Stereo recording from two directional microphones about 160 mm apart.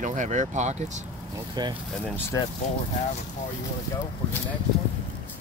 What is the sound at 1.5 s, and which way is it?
Speech, 30° right (ahead or behind).